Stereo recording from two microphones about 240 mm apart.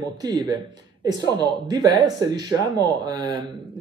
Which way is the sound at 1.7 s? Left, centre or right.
Centre.